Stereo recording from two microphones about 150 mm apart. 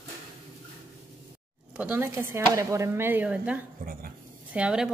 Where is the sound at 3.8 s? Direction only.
75° right (ahead or behind).